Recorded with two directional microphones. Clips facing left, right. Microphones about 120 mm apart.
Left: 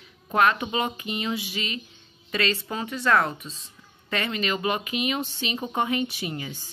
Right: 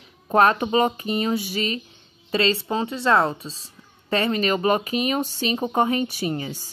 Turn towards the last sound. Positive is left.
turn(degrees=-40)  # may be behind; listen again after turning